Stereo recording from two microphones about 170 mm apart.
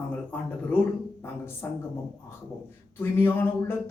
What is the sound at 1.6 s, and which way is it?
Speech, 15° left (ahead or behind).